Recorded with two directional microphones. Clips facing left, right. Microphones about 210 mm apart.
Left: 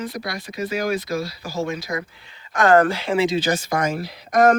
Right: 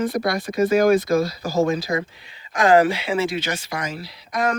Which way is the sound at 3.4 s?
40° left (ahead or behind).